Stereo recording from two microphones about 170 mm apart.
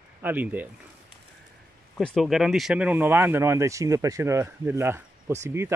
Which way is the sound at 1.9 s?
Centre (ahead or behind).